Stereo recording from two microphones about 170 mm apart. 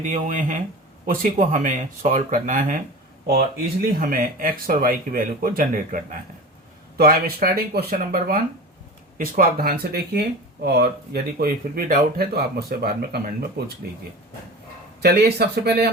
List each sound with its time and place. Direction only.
0.0 s speech: 50° right (ahead or behind)
3.2 s speech: 60° right (ahead or behind)
13.6 s speech: 75° right (ahead or behind)
15.0 s speech: 70° right (ahead or behind)